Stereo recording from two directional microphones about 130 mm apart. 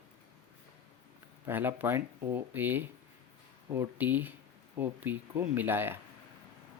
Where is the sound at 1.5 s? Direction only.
15° right (ahead or behind).